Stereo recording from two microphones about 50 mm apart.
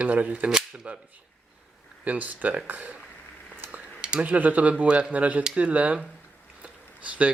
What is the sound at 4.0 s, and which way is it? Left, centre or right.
Speech, right.